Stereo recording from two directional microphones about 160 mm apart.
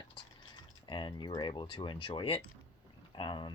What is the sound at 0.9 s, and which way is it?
Speech, 30° left (ahead or behind).